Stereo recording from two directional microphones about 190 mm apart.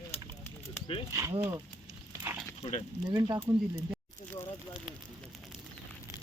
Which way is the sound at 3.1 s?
20° right (ahead or behind).